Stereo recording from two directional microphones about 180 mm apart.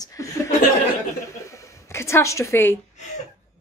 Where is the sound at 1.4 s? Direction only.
15° left (ahead or behind).